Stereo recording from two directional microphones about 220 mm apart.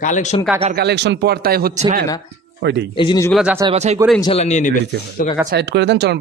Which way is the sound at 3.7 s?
30° right (ahead or behind).